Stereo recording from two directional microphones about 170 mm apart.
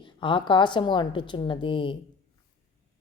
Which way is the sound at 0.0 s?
30° left (ahead or behind).